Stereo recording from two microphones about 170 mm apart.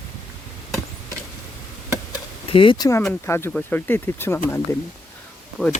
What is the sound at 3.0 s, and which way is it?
Speech, 10° left (ahead or behind).